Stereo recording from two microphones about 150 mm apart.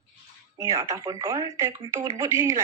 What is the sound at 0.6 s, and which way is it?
A woman's voice, 20° right (ahead or behind).